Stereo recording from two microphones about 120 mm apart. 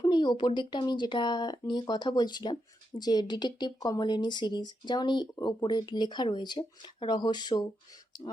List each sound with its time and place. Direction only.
0.0 s speech: 40° left (ahead or behind)